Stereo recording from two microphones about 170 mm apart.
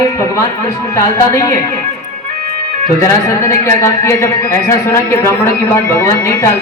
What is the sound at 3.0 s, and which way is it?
A man's voice, 15° left (ahead or behind).